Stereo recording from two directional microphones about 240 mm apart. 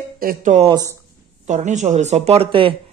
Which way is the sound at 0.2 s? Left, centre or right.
Right.